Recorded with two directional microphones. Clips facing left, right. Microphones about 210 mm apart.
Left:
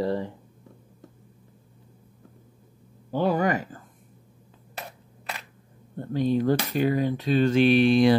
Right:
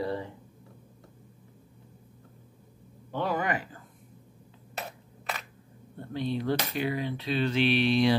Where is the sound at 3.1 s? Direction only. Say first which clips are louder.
Left 6 dB; 35° left (ahead or behind).